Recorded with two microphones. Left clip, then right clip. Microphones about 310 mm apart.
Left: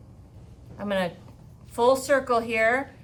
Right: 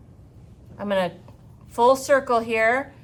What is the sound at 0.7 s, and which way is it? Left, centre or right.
A woman's voice, centre.